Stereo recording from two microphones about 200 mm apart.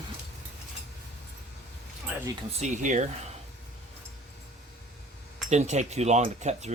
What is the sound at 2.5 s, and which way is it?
Speech, 35° right (ahead or behind).